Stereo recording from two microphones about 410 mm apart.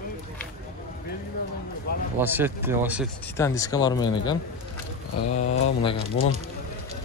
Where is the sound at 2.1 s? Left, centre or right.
Centre.